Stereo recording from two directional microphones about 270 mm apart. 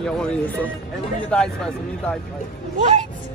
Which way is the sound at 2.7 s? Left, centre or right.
Right.